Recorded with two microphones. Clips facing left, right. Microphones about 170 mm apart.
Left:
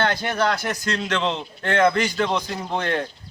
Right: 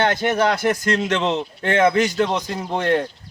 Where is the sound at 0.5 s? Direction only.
50° right (ahead or behind).